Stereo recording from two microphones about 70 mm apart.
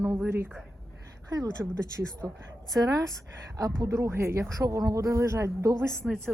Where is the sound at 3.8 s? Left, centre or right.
Right.